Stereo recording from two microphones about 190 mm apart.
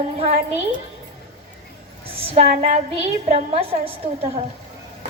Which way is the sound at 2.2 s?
30° right (ahead or behind).